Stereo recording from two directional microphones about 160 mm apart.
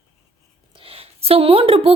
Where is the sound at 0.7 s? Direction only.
35° right (ahead or behind).